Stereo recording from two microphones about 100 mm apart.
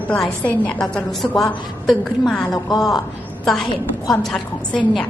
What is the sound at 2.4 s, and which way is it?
Speech, 40° left (ahead or behind).